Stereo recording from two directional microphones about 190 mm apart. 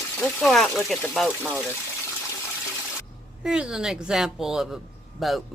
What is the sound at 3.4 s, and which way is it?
A woman's voice, 5° right (ahead or behind).